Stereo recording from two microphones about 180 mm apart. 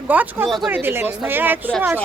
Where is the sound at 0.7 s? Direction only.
10° right (ahead or behind).